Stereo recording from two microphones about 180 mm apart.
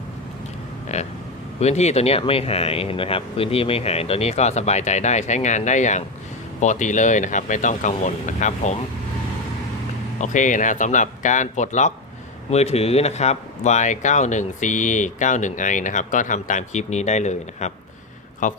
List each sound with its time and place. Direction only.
0.9 s speech: 40° left (ahead or behind)
10.2 s speech: 45° left (ahead or behind)